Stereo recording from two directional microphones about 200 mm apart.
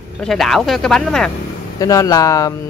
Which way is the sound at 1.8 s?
15° left (ahead or behind).